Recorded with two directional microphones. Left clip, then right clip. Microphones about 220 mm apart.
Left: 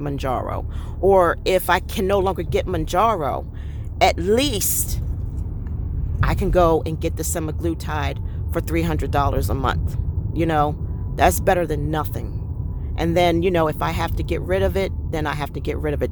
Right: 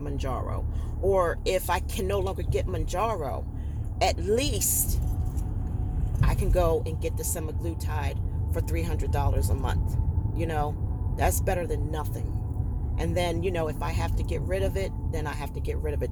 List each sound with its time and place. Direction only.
0.0 s speech: 45° left (ahead or behind)
6.1 s speech: 45° left (ahead or behind)